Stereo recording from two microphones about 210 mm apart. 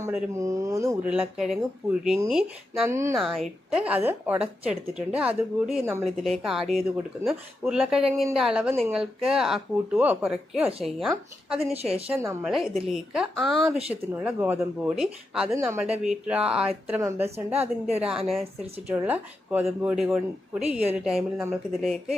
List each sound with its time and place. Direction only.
0.0 s speech: 10° right (ahead or behind)
2.9 s speech: 15° right (ahead or behind)
3.2 s speech: centre (ahead or behind)
11.7 s a woman's voice: 30° right (ahead or behind)
12.0 s speech: 10° right (ahead or behind)
12.5 s speech: centre (ahead or behind)